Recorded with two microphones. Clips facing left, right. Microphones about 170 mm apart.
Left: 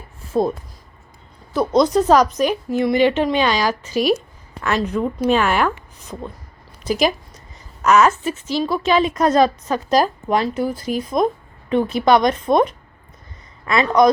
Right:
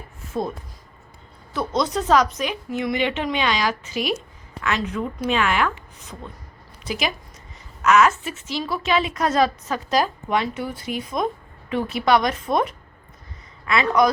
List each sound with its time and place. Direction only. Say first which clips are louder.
1.5 s a woman's voice: left 8 dB; 40° left (ahead or behind)